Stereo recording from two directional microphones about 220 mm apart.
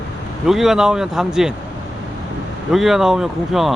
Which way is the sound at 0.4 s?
Centre (ahead or behind).